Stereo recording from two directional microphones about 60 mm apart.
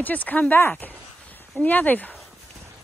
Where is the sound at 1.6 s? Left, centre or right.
Left.